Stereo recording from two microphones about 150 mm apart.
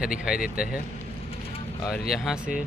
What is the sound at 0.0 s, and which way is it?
Speech, 5° right (ahead or behind).